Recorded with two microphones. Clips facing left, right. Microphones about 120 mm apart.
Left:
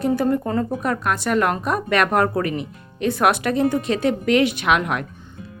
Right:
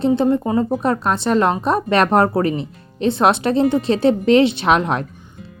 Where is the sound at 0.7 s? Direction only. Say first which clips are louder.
Right 4 dB; 30° right (ahead or behind).